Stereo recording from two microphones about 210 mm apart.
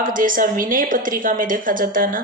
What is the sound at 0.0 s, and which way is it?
A woman's voice, 40° right (ahead or behind).